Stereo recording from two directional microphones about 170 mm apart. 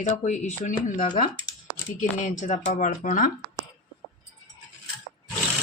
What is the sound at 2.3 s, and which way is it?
Speech, 45° left (ahead or behind).